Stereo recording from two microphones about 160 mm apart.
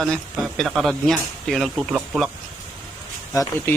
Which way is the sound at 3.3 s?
20° left (ahead or behind).